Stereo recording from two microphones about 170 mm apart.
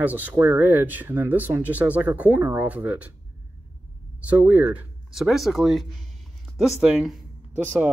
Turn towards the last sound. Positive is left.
turn(degrees=0)  # may be behind; listen again after turning